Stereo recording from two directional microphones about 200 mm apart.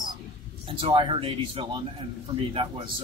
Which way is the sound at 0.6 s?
25° right (ahead or behind).